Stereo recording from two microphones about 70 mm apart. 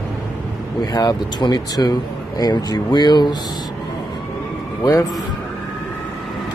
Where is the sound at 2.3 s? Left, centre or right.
Left.